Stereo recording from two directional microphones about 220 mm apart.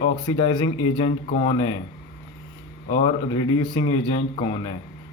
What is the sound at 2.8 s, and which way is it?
Speech, 25° left (ahead or behind).